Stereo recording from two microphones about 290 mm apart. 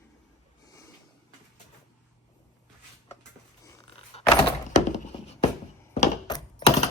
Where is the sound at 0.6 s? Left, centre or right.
Centre.